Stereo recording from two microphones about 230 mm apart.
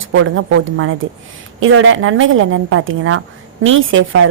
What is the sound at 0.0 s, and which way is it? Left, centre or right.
A woman's voice, right.